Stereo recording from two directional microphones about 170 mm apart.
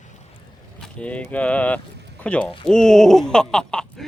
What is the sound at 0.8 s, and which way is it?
Speech, 5° left (ahead or behind).